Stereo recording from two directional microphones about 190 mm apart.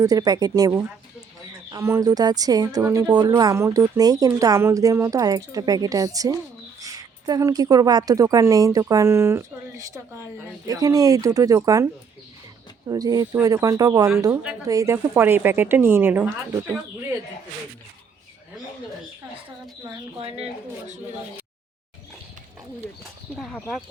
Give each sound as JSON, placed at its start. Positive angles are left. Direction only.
{"t": 0.0, "sound": "a woman's voice", "side_deg": -20}
{"t": 12.9, "sound": "a woman's voice", "side_deg": -20}
{"t": 19.8, "sound": "speech", "side_deg": -25}
{"t": 23.4, "sound": "speech", "side_deg": 5}